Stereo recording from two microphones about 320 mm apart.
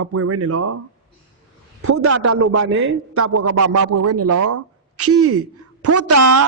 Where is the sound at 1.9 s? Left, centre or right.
Right.